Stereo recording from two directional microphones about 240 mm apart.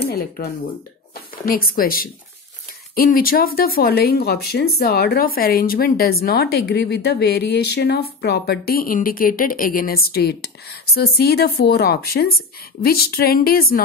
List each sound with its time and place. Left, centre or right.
0.0 s speech: left